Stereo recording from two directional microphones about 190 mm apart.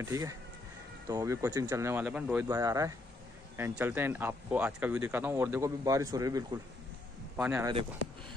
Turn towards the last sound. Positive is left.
turn(degrees=-10)  # may be behind; listen again after turning